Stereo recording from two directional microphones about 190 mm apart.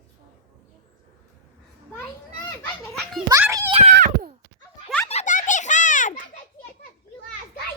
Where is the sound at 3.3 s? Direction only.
15° right (ahead or behind).